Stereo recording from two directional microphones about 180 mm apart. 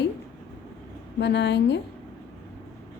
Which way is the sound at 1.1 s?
75° left (ahead or behind).